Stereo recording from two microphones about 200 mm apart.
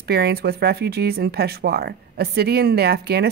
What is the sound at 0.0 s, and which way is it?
Speech, 50° right (ahead or behind).